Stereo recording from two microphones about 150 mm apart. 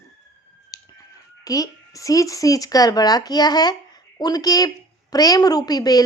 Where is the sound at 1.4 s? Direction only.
25° left (ahead or behind).